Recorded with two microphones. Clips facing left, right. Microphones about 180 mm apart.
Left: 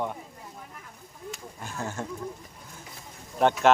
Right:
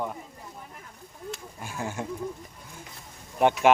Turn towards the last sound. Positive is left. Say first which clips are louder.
# right 1 dB
turn(degrees=-10)  # may be behind; listen again after turning